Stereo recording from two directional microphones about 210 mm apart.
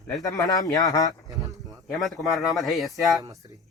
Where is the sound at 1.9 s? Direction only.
Centre (ahead or behind).